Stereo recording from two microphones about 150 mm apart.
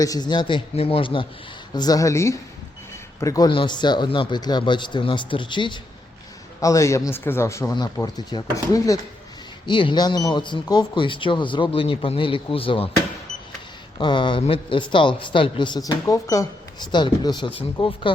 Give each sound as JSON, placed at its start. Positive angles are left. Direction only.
{"t": 0.0, "sound": "a man's voice", "side_deg": 25}
{"t": 6.6, "sound": "speech", "side_deg": 20}
{"t": 9.6, "sound": "a man's voice", "side_deg": 35}
{"t": 14.0, "sound": "a man's voice", "side_deg": 30}